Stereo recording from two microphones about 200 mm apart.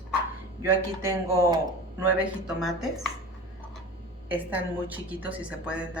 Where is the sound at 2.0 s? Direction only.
10° right (ahead or behind).